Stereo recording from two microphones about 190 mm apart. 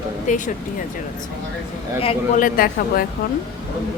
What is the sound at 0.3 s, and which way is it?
Speech, 40° left (ahead or behind).